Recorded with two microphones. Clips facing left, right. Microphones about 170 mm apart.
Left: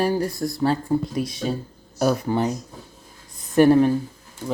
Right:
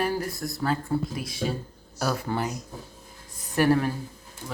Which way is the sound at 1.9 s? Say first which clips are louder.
Left 7 dB; 20° left (ahead or behind).